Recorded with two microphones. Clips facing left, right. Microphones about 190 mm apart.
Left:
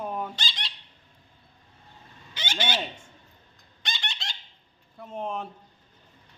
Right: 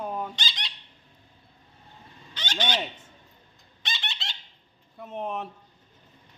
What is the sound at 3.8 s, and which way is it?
Squeak, centre (ahead or behind).